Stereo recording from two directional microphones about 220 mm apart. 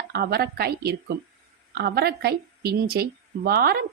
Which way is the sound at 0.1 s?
45° right (ahead or behind).